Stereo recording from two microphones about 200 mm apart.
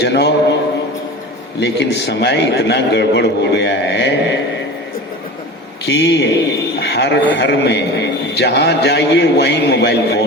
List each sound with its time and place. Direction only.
0.0 s a man's voice: 55° left (ahead or behind)
1.5 s a man's voice: 60° left (ahead or behind)
5.8 s a man's voice: 60° left (ahead or behind)
6.7 s a sound: 55° left (ahead or behind)
7.3 s a man's voice: 55° left (ahead or behind)